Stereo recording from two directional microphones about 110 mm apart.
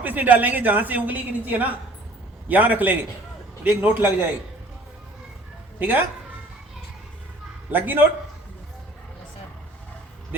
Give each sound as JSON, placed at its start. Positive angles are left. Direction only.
{"t": 0.0, "sound": "a woman's voice", "side_deg": -15}
{"t": 5.8, "sound": "a woman's voice", "side_deg": -15}
{"t": 7.7, "sound": "a woman's voice", "side_deg": -20}